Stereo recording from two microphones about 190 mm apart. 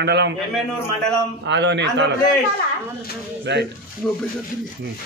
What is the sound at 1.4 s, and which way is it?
Speech, 70° right (ahead or behind).